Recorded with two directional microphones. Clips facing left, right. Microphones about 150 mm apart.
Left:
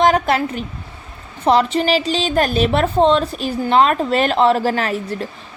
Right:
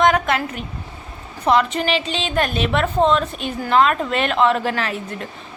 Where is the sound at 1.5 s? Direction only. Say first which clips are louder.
Left 3 dB; 35° left (ahead or behind).